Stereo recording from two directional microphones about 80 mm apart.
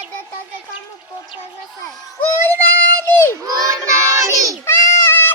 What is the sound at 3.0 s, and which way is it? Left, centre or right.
Crowd, left.